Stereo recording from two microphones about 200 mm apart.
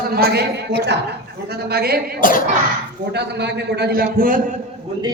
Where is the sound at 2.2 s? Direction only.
45° left (ahead or behind).